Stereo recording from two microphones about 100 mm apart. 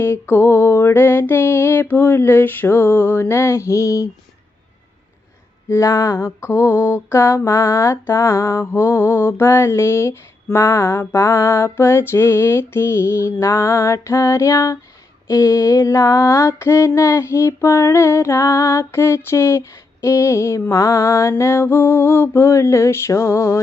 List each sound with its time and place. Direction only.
0.0 s female singing: 20° left (ahead or behind)
5.6 s female singing: 30° left (ahead or behind)